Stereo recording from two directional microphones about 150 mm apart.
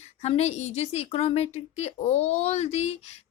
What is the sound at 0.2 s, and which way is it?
A woman's voice, 45° left (ahead or behind).